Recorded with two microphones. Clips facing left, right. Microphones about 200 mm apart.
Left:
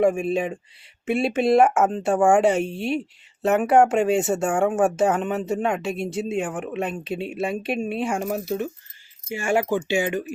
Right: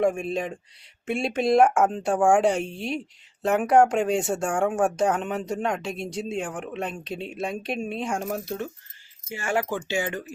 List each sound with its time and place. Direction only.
0.0 s speech: 5° left (ahead or behind)
9.3 s speech: 20° left (ahead or behind)